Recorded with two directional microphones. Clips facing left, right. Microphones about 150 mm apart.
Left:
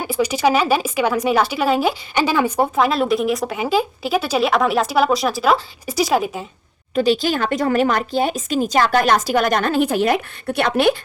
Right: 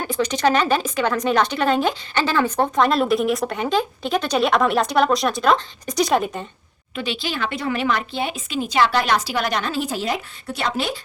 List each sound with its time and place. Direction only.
0.0 s a woman's voice: 10° left (ahead or behind)
6.9 s speech: 40° left (ahead or behind); by 10.9 s 60° left (ahead or behind)